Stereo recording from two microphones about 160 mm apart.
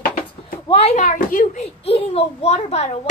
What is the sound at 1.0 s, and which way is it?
Speech, 55° left (ahead or behind).